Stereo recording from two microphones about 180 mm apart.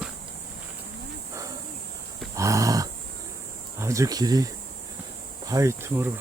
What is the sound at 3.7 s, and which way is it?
Speech, 15° right (ahead or behind).